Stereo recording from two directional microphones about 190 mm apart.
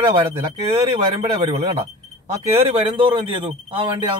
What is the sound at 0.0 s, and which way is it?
A man's voice, 30° right (ahead or behind).